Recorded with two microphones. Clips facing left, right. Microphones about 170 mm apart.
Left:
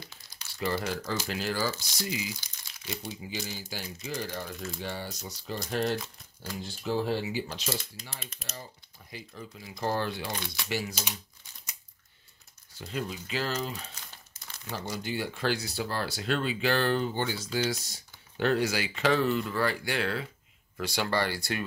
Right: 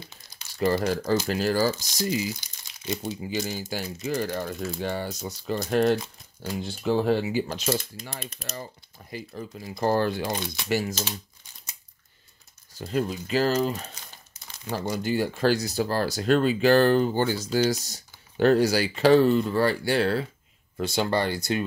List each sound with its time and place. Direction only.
0.0 s crumpling: 20° right (ahead or behind)
0.6 s speech: 40° right (ahead or behind)
8.2 s speech: 40° right (ahead or behind)
10.3 s speech: 20° right (ahead or behind)
10.7 s speech: 45° right (ahead or behind)
12.7 s speech: 45° right (ahead or behind)
20.7 s speech: 25° right (ahead or behind)